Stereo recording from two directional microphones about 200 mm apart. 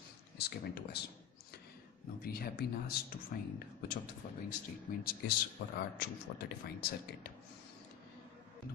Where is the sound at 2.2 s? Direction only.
50° left (ahead or behind).